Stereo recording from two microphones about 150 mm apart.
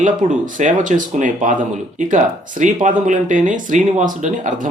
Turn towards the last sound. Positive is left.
turn(degrees=-60)  # may be behind; listen again after turning